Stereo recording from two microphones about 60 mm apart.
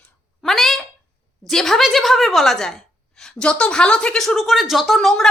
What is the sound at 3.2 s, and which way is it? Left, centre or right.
Speech, centre.